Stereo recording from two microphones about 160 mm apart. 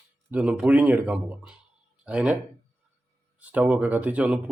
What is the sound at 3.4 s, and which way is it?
Speech, 10° right (ahead or behind).